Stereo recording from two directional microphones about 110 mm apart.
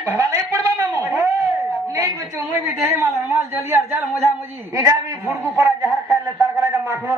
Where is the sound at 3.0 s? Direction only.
20° right (ahead or behind).